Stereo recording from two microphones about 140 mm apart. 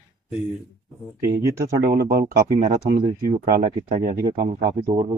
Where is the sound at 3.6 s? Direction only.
50° right (ahead or behind).